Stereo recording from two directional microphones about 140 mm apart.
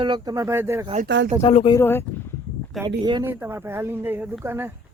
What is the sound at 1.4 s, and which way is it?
Speech, 45° left (ahead or behind).